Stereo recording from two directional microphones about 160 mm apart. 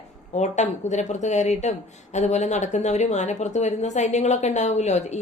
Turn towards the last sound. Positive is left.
turn(degrees=45)  # may be behind; listen again after turning